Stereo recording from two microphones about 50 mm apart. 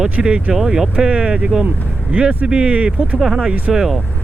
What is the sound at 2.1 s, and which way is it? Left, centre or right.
Speech, right.